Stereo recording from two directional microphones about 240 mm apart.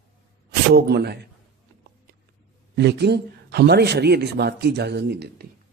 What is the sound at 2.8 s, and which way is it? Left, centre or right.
Speech, right.